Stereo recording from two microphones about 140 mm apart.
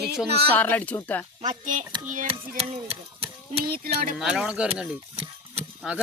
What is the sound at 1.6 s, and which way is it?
Speech, 60° right (ahead or behind).